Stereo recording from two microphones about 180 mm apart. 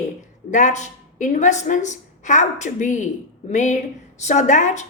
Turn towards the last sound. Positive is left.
turn(degrees=40)  # may be behind; listen again after turning